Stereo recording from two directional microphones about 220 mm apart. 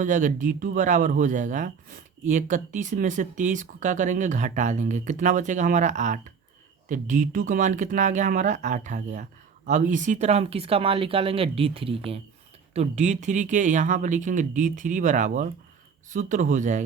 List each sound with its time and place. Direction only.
0.0 s speech: 35° right (ahead or behind)